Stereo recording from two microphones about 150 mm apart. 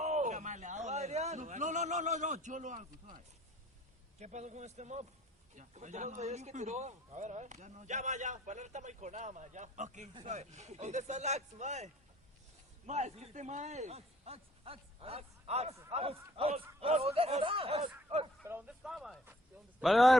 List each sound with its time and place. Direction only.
0.0 s a sound: 50° right (ahead or behind)
4.2 s a man's voice: 50° right (ahead or behind)
18.4 s speech: 15° right (ahead or behind)
18.8 s speech: 5° right (ahead or behind)